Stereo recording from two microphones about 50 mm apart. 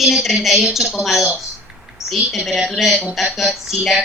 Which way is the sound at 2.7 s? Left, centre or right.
Centre.